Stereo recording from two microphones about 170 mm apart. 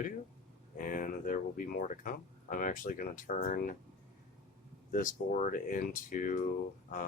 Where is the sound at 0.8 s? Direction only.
55° left (ahead or behind).